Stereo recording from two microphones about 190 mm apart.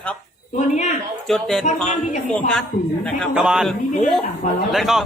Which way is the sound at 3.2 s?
5° right (ahead or behind).